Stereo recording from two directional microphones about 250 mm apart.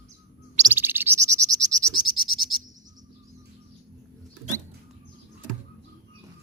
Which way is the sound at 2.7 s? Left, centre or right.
Centre.